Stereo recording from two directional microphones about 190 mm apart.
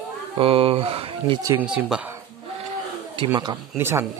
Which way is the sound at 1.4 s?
15° right (ahead or behind).